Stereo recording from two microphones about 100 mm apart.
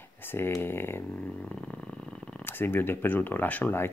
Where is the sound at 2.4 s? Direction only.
20° left (ahead or behind).